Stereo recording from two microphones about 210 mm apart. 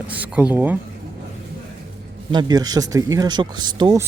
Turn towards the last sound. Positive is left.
turn(degrees=-20)  # may be behind; listen again after turning